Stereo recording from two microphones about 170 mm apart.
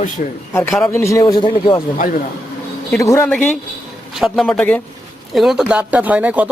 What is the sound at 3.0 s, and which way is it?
Speech, 20° left (ahead or behind).